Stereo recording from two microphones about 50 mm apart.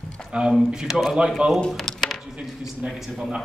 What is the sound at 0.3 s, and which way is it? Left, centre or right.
Speech, centre.